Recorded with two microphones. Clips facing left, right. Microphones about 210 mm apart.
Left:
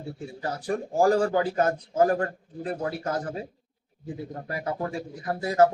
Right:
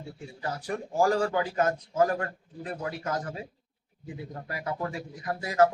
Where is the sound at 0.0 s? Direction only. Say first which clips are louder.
Left 3 dB; 30° left (ahead or behind).